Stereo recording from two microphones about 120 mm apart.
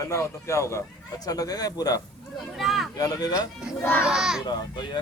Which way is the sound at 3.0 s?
30° left (ahead or behind).